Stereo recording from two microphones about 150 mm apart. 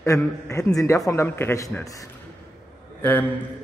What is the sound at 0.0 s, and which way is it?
Speech, 20° left (ahead or behind).